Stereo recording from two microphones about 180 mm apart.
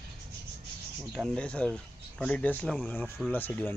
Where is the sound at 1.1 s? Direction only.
5° left (ahead or behind).